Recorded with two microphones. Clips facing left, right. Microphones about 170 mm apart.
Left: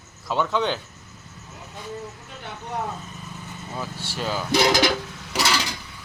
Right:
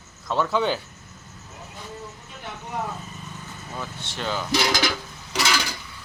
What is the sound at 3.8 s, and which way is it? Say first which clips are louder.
Vehicle: left 2 dB; 5° left (ahead or behind).